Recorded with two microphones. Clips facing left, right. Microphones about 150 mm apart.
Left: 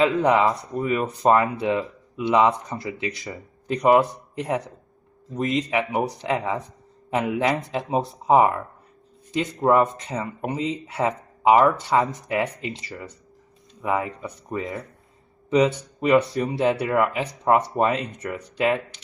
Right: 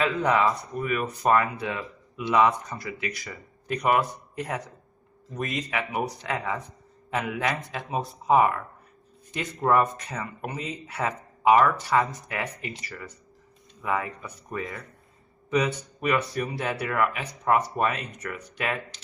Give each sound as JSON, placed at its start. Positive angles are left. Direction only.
{"t": 0.0, "sound": "speech", "side_deg": 20}